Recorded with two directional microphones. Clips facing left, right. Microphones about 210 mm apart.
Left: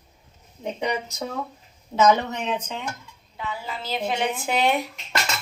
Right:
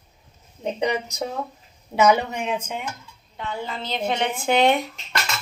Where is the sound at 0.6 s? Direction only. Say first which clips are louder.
Right 3 dB; 20° right (ahead or behind).